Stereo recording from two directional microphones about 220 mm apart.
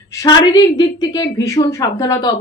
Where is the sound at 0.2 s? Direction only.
20° left (ahead or behind).